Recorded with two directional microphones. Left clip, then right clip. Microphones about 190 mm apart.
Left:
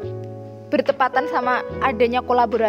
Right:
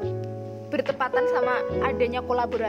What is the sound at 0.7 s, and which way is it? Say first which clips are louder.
Speech: left 7 dB; 40° left (ahead or behind).